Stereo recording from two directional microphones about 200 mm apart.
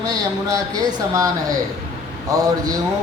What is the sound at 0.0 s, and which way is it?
Speech, 20° right (ahead or behind).